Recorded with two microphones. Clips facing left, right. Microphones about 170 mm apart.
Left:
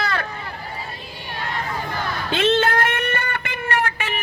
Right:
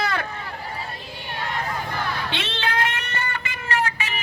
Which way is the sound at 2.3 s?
45° left (ahead or behind).